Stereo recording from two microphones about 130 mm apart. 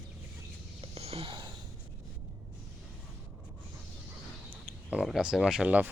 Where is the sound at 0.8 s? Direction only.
50° right (ahead or behind).